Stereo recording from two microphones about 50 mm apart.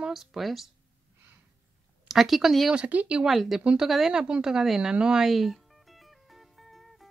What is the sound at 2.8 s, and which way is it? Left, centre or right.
Speech, right.